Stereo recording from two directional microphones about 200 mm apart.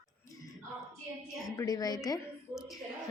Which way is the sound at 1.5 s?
20° left (ahead or behind).